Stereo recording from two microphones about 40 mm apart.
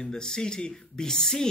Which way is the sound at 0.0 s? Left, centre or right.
Centre.